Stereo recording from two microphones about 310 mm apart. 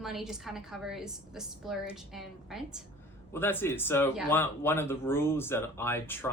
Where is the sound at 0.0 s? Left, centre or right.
Centre.